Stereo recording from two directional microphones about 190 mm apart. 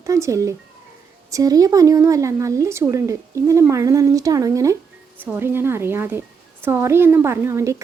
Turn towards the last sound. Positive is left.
turn(degrees=-15)  # may be behind; listen again after turning